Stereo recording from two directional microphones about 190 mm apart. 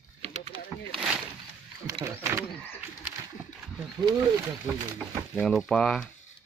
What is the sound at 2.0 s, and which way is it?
Speech, 15° right (ahead or behind).